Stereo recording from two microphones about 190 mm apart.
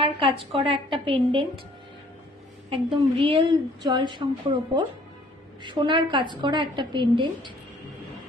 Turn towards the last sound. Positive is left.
turn(degrees=-25)  # may be behind; listen again after turning